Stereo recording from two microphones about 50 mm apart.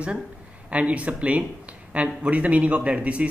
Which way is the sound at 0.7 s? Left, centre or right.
Right.